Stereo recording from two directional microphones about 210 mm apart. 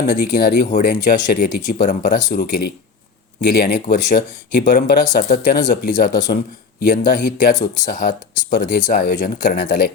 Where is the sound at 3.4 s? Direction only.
50° left (ahead or behind).